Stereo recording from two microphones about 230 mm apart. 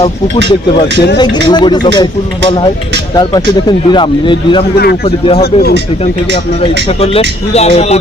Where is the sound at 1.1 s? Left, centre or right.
Centre.